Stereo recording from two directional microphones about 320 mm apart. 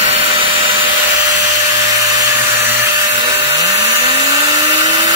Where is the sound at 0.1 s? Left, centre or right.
Centre.